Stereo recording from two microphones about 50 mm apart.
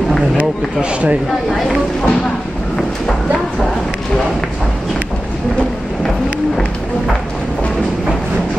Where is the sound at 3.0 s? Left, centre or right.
Centre.